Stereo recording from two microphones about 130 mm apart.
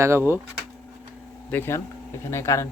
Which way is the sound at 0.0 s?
20° right (ahead or behind).